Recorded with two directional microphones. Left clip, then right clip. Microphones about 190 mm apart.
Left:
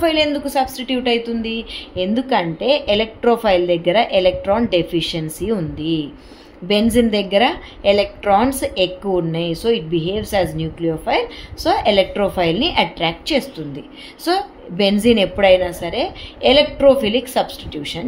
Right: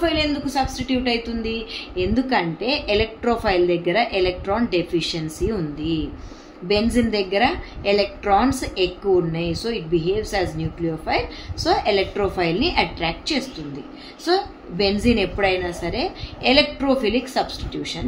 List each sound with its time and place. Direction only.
0.0 s a woman's voice: 45° left (ahead or behind)